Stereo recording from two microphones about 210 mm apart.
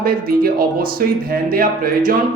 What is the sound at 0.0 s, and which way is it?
Speech, 45° right (ahead or behind).